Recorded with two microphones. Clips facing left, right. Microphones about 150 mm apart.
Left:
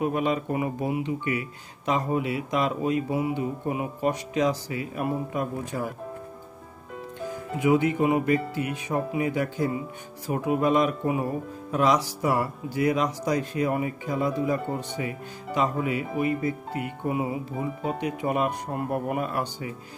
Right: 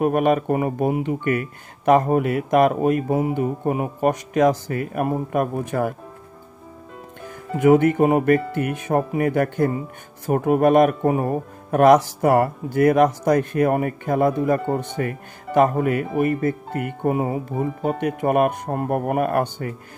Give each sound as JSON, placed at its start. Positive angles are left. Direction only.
{"t": 0.0, "sound": "speech", "side_deg": -55}
{"t": 7.5, "sound": "speech", "side_deg": -55}